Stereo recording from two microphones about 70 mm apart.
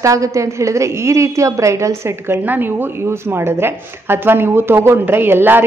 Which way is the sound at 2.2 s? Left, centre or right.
Right.